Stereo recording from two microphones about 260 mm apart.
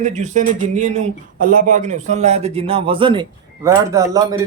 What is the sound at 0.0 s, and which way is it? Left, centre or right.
Speech, right.